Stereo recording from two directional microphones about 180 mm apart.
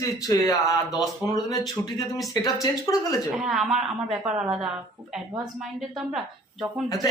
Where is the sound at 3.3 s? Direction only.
Centre (ahead or behind).